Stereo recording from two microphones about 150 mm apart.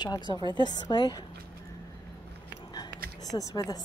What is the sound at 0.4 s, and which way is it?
Speech, 30° right (ahead or behind).